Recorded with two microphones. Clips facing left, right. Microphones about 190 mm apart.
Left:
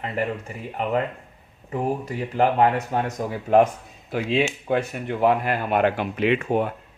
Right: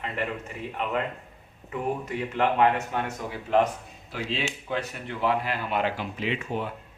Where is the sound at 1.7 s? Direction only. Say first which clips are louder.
Left 4 dB; 35° left (ahead or behind).